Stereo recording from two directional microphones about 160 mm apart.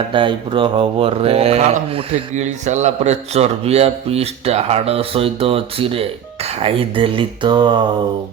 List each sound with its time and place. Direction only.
0.1 s mantra: 30° right (ahead or behind)